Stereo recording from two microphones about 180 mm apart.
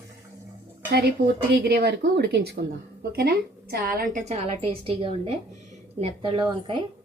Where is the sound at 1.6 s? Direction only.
65° right (ahead or behind); by 6.8 s 25° right (ahead or behind).